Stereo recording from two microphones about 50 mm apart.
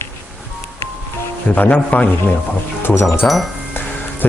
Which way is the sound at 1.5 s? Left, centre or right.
Left.